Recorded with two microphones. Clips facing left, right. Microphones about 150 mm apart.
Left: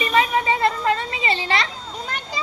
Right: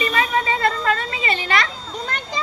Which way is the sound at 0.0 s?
25° left (ahead or behind).